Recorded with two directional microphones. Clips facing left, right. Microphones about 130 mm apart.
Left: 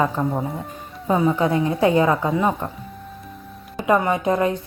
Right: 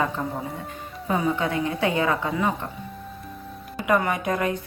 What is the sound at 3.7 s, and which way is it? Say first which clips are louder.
Speech: left 4 dB; 25° left (ahead or behind).